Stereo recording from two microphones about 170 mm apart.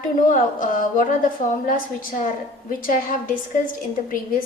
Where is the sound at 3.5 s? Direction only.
50° left (ahead or behind).